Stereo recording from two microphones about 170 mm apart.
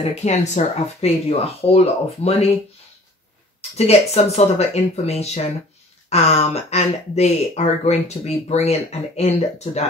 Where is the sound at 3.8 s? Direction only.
40° left (ahead or behind).